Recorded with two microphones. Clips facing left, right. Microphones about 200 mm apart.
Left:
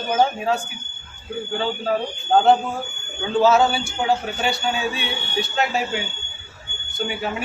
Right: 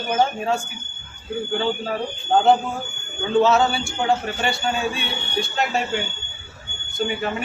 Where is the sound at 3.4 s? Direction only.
Centre (ahead or behind).